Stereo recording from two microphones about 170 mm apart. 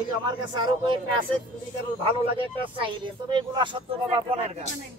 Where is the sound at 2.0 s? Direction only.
30° right (ahead or behind).